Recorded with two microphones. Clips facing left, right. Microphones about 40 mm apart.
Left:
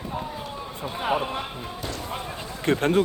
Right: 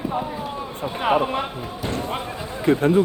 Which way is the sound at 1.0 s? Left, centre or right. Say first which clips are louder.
Right 6 dB; right.